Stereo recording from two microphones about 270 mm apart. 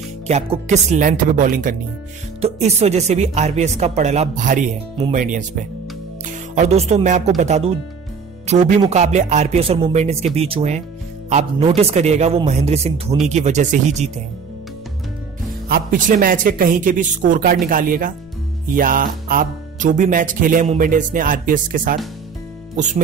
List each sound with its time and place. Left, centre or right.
0.3 s speech: right
15.7 s speech: right